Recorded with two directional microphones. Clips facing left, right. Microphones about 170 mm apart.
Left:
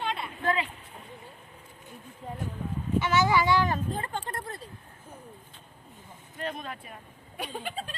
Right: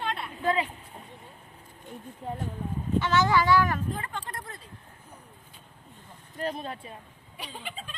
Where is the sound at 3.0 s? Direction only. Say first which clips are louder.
Even; 15° left (ahead or behind).